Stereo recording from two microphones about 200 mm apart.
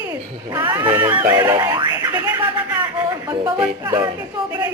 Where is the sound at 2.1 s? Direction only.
10° right (ahead or behind).